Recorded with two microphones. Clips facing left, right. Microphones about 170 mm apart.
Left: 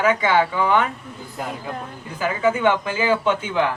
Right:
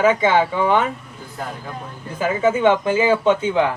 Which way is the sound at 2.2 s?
25° right (ahead or behind).